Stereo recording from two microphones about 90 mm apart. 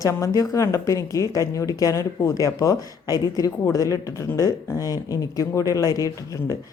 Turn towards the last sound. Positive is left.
turn(degrees=40)  # may be behind; listen again after turning